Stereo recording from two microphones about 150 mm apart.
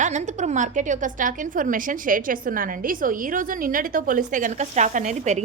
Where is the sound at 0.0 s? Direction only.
50° right (ahead or behind).